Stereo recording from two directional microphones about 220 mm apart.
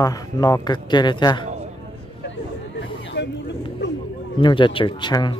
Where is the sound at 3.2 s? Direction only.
55° left (ahead or behind).